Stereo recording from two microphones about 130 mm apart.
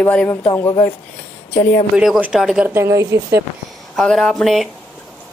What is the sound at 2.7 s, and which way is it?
Speech, 20° right (ahead or behind).